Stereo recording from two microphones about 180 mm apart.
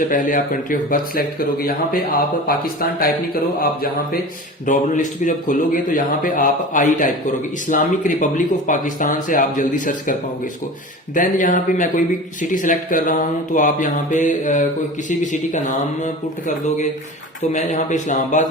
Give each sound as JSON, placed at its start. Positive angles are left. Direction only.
{"t": 0.0, "sound": "speech", "side_deg": 50}